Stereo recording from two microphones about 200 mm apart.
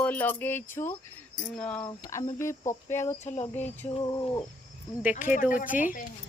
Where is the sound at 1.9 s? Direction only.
20° left (ahead or behind).